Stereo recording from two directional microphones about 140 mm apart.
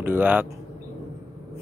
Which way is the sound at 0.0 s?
15° right (ahead or behind).